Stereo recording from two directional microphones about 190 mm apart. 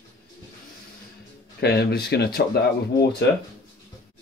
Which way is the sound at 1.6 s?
60° left (ahead or behind).